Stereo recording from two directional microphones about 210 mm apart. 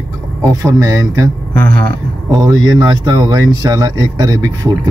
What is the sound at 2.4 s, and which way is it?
Speech, 20° right (ahead or behind).